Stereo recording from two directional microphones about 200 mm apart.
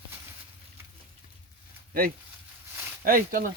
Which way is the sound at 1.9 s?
45° right (ahead or behind).